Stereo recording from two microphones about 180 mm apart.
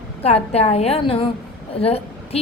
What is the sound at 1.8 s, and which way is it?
Speech, 35° left (ahead or behind).